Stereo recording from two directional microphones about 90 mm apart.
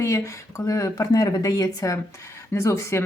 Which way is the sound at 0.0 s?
35° left (ahead or behind).